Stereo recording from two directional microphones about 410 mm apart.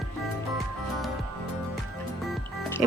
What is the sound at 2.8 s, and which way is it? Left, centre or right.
Speech, centre.